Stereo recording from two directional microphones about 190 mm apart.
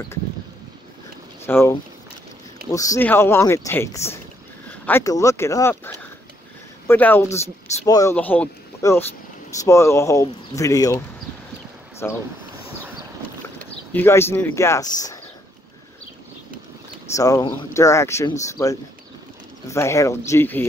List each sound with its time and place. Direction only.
1.4 s speech: 15° left (ahead or behind)
12.0 s speech: 10° left (ahead or behind)
13.6 s speech: 10° left (ahead or behind)
17.1 s speech: 20° left (ahead or behind)